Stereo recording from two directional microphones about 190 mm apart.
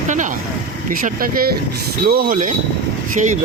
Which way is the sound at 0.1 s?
40° right (ahead or behind).